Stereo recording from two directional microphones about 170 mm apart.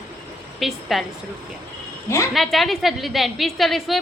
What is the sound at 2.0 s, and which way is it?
Speech, 15° left (ahead or behind).